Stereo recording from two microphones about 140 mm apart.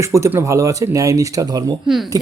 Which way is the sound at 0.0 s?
20° right (ahead or behind).